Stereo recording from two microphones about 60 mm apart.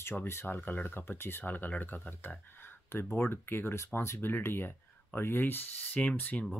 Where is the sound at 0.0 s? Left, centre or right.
Left.